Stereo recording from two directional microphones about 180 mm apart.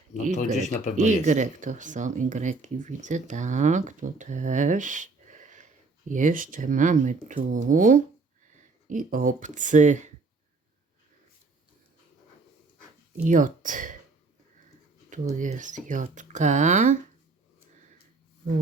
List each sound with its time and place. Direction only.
0.3 s speech: 45° left (ahead or behind)
0.9 s speech: 40° right (ahead or behind)
13.2 s speech: 45° right (ahead or behind)
15.1 s speech: 45° right (ahead or behind)